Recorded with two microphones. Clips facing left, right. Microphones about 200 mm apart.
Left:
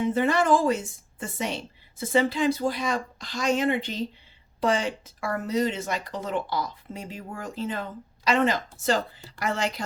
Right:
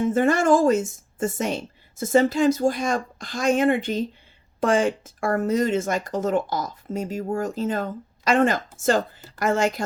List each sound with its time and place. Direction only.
0.0 s speech: 45° right (ahead or behind)